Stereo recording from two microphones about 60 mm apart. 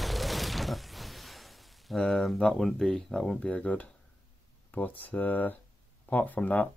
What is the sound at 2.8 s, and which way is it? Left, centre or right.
Speech, centre.